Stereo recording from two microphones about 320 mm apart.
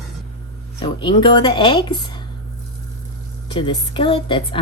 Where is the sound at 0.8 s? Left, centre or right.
Centre.